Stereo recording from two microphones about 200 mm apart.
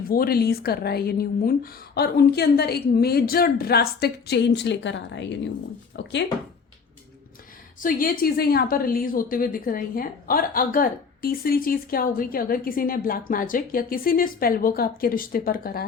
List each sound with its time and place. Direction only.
0.1 s a woman's voice: 50° left (ahead or behind)
7.8 s a woman's voice: 45° left (ahead or behind)